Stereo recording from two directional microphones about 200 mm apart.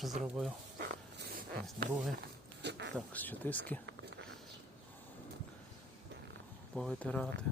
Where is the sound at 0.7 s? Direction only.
50° right (ahead or behind).